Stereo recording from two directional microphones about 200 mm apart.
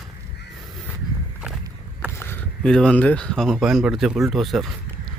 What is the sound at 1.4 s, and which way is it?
Vehicle, centre (ahead or behind).